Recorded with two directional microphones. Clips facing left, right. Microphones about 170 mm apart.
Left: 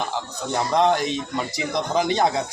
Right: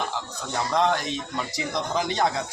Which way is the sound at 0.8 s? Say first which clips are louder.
Left 4 dB; 20° left (ahead or behind).